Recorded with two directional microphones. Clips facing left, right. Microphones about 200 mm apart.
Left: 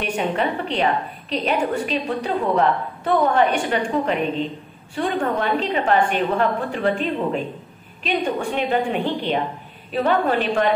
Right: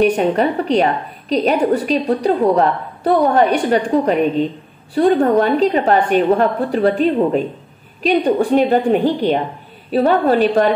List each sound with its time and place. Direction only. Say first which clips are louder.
0.0 s a woman's voice: right 8 dB; 40° right (ahead or behind)